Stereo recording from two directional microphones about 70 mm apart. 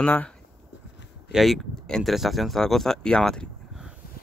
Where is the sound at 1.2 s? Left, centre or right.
Centre.